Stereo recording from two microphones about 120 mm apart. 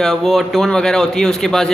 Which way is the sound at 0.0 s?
Centre (ahead or behind).